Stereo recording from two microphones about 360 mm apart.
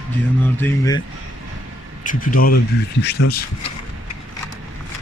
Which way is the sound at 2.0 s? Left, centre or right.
Left.